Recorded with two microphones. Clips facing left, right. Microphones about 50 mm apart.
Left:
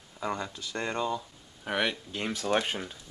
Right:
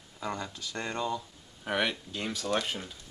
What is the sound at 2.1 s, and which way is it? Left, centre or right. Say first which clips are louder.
Speech: left 3 dB; left.